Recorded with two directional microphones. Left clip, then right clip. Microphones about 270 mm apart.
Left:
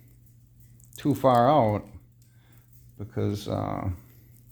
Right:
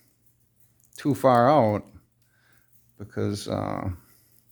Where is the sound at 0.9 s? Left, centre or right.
Right.